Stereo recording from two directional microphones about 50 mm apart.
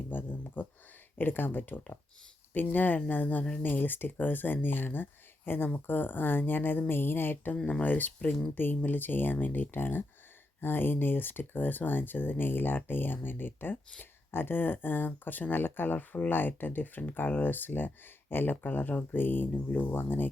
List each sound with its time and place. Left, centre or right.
0.1 s speech: left
7.5 s speech: left